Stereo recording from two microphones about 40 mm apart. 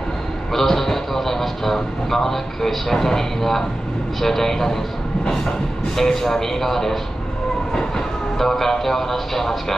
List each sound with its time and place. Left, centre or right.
0.5 s speech: centre
5.2 s train: centre
5.9 s speech: centre
8.4 s speech: centre